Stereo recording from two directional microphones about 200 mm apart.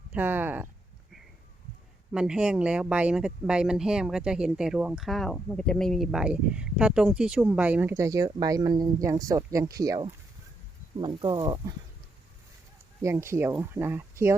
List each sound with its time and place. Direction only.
0.1 s speech: 10° right (ahead or behind)
2.1 s speech: 5° right (ahead or behind); by 11.7 s 20° right (ahead or behind)
13.0 s speech: 15° right (ahead or behind)